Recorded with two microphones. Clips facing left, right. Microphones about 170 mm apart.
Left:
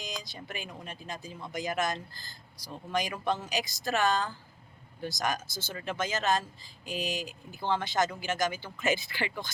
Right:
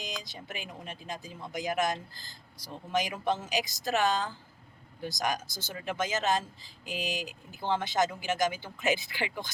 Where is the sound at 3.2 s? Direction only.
20° right (ahead or behind).